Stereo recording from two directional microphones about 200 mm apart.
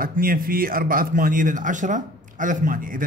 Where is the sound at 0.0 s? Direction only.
45° right (ahead or behind).